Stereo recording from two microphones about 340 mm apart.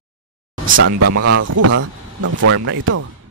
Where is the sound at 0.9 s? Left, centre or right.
Right.